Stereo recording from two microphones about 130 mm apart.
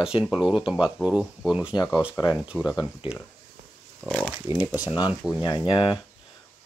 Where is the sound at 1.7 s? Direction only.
30° left (ahead or behind).